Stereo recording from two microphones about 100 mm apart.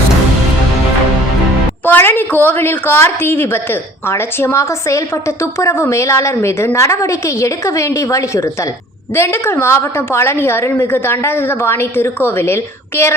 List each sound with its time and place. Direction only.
1.8 s a woman's voice: 20° left (ahead or behind)